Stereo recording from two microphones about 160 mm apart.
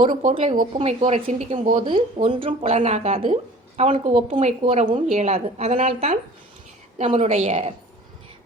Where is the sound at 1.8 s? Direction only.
30° right (ahead or behind).